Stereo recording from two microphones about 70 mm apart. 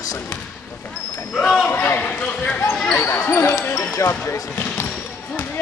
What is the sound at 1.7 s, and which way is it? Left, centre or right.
Speech, left.